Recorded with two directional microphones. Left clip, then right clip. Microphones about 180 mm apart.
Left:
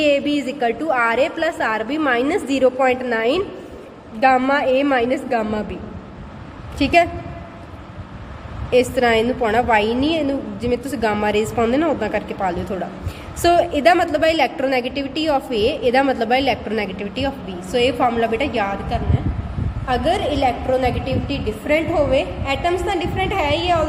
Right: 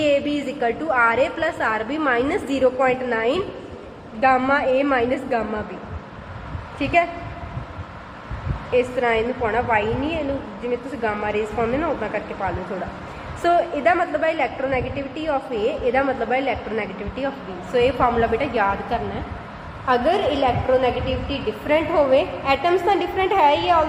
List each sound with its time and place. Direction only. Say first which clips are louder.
0.0 s a woman's voice: left 2 dB; 35° left (ahead or behind)
6.7 s a woman's voice: left 4 dB; 45° left (ahead or behind)
8.7 s a woman's voice: left 4 dB; 45° left (ahead or behind); by 20.5 s 15° left (ahead or behind)
21.7 s a woman's voice: left 1 dB; 20° left (ahead or behind)
22.1 s a woman's voice: right 1 dB; centre (ahead or behind)